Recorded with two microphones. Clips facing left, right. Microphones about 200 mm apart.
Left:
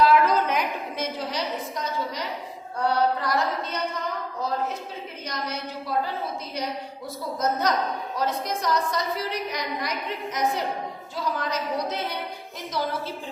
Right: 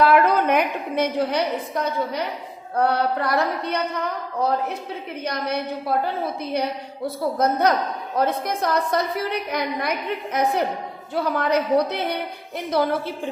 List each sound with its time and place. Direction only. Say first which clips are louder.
0.0 s a woman's voice: right 3 dB; 60° right (ahead or behind)